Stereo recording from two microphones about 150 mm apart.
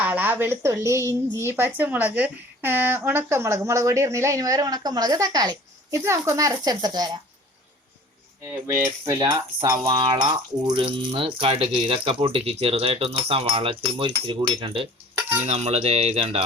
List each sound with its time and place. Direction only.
0.0 s a woman's voice: 10° right (ahead or behind); by 7.2 s 25° right (ahead or behind)
8.6 s a woman's voice: 20° right (ahead or behind)
9.6 s speech: 30° right (ahead or behind)